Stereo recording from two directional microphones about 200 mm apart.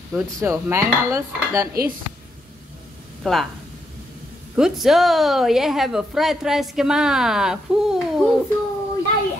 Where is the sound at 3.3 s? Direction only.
Centre (ahead or behind).